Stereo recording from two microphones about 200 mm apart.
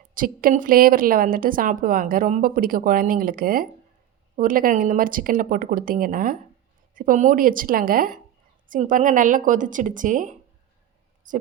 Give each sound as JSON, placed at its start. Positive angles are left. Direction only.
{"t": 0.1, "sound": "a woman's voice", "side_deg": -45}